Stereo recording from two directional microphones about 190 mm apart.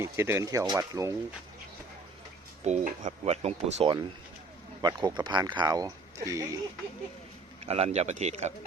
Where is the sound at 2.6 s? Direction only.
40° right (ahead or behind).